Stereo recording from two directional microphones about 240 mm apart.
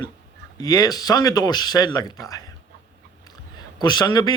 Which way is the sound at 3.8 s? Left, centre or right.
Centre.